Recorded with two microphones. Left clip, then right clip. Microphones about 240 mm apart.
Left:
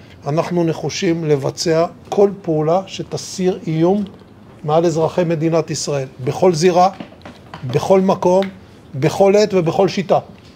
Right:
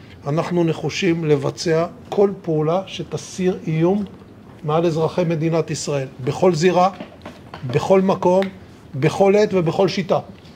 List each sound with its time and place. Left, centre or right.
0.2 s speech: left